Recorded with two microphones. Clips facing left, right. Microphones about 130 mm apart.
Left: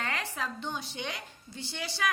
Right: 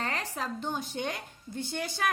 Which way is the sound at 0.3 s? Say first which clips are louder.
Right 2 dB; 40° right (ahead or behind).